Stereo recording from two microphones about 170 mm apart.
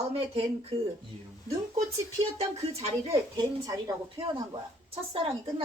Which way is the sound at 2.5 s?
35° right (ahead or behind).